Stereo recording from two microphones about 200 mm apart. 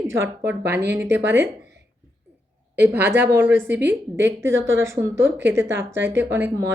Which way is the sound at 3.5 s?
65° right (ahead or behind).